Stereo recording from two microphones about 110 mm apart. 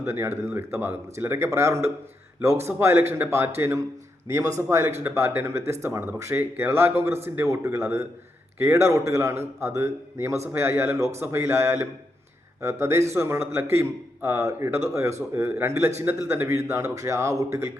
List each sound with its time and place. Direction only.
0.0 s speech: 25° right (ahead or behind)
13.1 s speech: 25° right (ahead or behind)